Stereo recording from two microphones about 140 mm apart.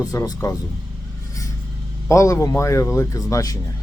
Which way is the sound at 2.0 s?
20° left (ahead or behind).